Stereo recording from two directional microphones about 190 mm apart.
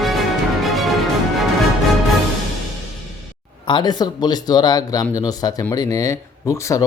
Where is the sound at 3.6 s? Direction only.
25° left (ahead or behind).